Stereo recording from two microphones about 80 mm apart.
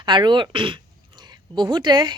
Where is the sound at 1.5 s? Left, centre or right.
Right.